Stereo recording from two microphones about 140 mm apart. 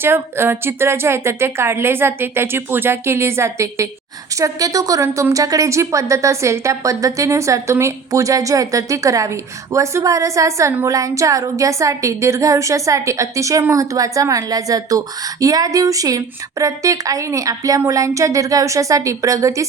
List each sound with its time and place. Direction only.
0.0 s a woman's voice: 15° right (ahead or behind)